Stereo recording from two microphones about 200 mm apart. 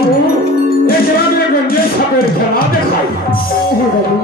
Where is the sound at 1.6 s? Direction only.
50° left (ahead or behind).